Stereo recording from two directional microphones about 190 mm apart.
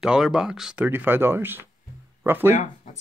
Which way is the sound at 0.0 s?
5° right (ahead or behind).